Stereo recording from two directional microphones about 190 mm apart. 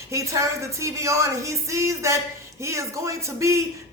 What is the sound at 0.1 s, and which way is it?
Speech, 15° right (ahead or behind).